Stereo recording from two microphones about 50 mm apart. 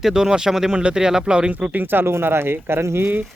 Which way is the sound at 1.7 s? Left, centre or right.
Right.